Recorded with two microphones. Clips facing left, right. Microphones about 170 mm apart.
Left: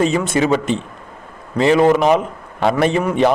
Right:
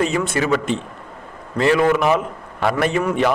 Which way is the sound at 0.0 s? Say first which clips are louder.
Left 4 dB; 25° left (ahead or behind).